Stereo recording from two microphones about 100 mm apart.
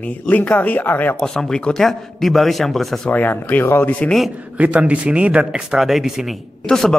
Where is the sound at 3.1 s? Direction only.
20° left (ahead or behind).